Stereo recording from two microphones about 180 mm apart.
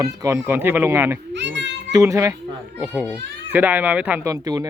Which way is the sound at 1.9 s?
20° right (ahead or behind).